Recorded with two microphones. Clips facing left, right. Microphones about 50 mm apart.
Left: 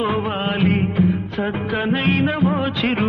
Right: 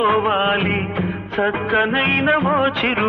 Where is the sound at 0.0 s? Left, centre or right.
Right.